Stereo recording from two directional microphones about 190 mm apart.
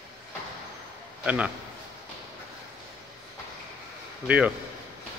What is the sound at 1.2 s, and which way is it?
Speech, 5° right (ahead or behind).